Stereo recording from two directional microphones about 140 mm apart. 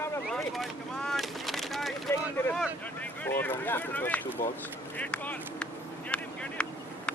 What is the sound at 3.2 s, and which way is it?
Speech, 15° left (ahead or behind).